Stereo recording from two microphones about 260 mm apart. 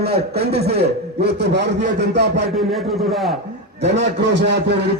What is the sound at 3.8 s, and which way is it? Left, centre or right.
A man's voice, right.